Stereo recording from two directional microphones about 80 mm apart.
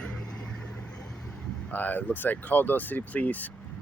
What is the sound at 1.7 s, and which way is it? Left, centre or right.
Speech, left.